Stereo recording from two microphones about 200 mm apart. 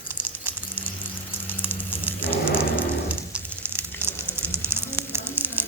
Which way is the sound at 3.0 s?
10° right (ahead or behind).